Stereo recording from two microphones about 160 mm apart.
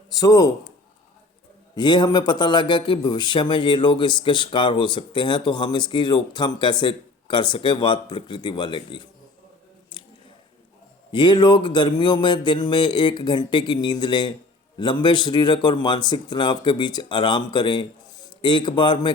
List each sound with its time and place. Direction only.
0.1 s speech: 25° left (ahead or behind)
1.7 s a man's voice: 25° left (ahead or behind)
11.1 s a man's voice: 30° left (ahead or behind)